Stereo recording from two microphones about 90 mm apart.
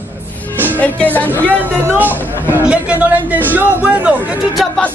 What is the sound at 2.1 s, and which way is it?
Speech, 25° left (ahead or behind).